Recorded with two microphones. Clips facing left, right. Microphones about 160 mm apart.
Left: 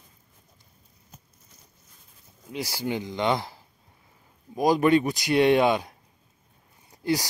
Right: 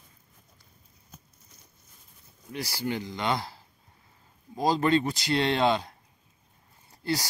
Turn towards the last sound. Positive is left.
turn(degrees=15)  # may be behind; listen again after turning